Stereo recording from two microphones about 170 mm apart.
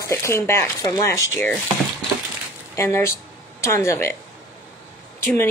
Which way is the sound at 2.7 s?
15° left (ahead or behind).